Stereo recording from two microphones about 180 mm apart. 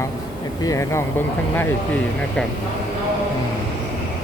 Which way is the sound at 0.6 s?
15° left (ahead or behind).